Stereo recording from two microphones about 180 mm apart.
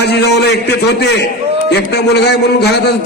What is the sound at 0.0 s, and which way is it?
Speech, 65° left (ahead or behind).